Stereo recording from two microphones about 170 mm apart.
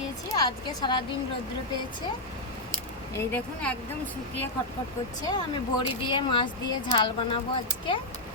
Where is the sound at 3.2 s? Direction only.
10° left (ahead or behind).